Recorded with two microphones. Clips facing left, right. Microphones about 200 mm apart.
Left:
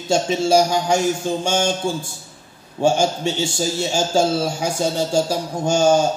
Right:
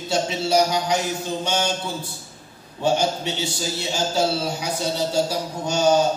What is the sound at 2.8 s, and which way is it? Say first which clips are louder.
A man's voice: left 4 dB; 45° left (ahead or behind).